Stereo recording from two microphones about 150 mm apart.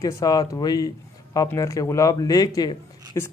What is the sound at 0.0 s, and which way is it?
Speech, 25° left (ahead or behind).